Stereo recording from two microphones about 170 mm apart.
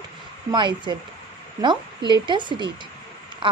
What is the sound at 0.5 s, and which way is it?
A woman's voice, 25° right (ahead or behind).